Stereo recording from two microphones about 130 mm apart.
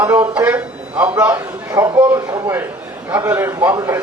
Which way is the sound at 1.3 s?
30° right (ahead or behind).